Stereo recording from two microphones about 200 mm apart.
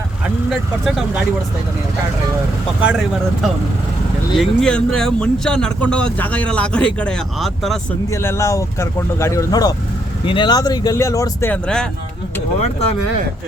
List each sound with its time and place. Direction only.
0.9 s speech: centre (ahead or behind)
4.4 s speech: 5° left (ahead or behind)
8.1 s speech: 15° left (ahead or behind)